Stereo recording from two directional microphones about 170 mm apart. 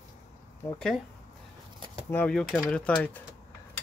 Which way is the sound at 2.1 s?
10° left (ahead or behind).